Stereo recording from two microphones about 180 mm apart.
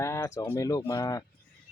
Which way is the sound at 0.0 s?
15° left (ahead or behind).